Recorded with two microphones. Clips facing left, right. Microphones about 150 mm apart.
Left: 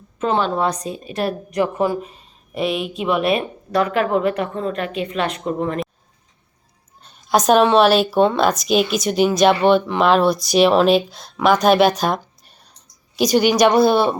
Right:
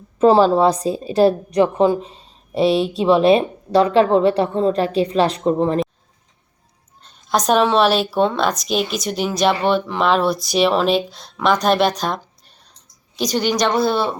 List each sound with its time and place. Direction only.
0.2 s a woman's voice: 35° right (ahead or behind)
7.0 s speech: 5° left (ahead or behind)